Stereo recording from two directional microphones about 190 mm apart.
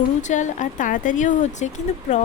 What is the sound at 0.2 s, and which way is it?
Speech, 40° left (ahead or behind).